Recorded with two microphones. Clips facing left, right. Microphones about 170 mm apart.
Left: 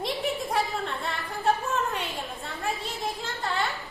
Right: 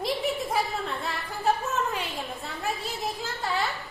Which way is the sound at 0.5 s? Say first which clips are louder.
Even; centre (ahead or behind).